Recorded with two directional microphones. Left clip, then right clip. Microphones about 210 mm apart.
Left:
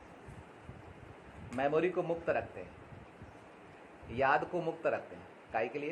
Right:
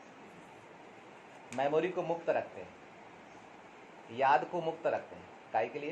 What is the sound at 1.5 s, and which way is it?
Speech, 35° left (ahead or behind).